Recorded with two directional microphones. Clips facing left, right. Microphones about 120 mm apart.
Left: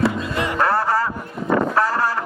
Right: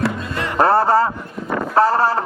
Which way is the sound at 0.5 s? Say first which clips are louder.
Right 6 dB; 30° right (ahead or behind).